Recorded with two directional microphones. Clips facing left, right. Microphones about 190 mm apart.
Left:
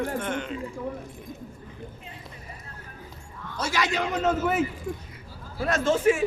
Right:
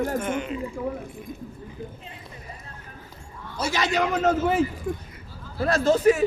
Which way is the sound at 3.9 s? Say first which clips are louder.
Right 6 dB; 40° right (ahead or behind).